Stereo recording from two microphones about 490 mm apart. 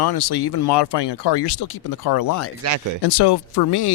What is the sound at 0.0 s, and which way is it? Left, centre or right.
Speech, left.